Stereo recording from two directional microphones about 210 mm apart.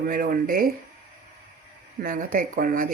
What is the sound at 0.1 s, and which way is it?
Speech, 40° right (ahead or behind).